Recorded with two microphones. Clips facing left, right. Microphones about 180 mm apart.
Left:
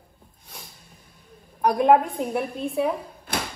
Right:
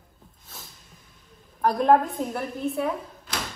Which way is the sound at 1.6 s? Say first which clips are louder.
Left 2 dB; 15° left (ahead or behind).